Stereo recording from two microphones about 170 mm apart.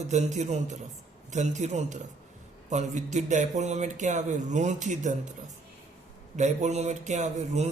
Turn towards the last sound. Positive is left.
turn(degrees=-40)  # may be behind; listen again after turning